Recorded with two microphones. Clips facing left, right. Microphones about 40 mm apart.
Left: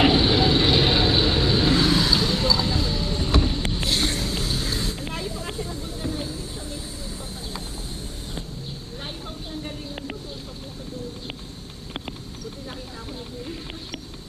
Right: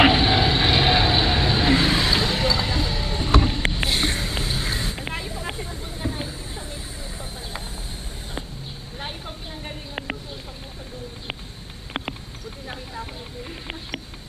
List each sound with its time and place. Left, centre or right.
0.1 s vehicle: right
2.6 s music: right
3.4 s a sound: right
3.8 s vehicle: centre
9.0 s vehicle: right